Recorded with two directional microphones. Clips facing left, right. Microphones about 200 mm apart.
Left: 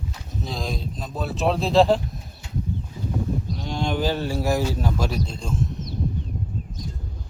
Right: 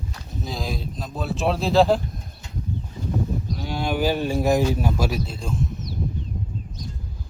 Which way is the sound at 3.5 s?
5° right (ahead or behind).